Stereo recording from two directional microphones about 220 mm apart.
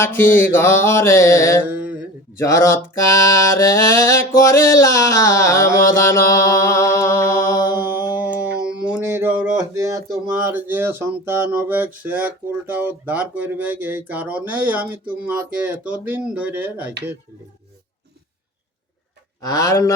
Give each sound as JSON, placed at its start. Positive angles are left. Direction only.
{"t": 0.0, "sound": "music", "side_deg": 10}
{"t": 7.8, "sound": "mantra", "side_deg": -10}
{"t": 8.1, "sound": "a sound", "side_deg": -5}
{"t": 10.1, "sound": "speech", "side_deg": -5}
{"t": 19.4, "sound": "music", "side_deg": 15}